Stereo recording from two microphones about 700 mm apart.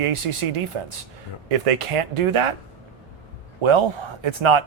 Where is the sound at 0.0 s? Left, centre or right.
Right.